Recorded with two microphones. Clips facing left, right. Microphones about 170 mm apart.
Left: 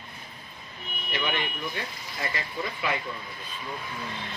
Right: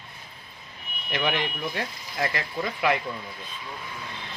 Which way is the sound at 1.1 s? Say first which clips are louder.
Right 3 dB; 85° right.